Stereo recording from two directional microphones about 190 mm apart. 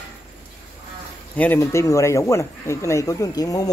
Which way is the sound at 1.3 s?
10° left (ahead or behind).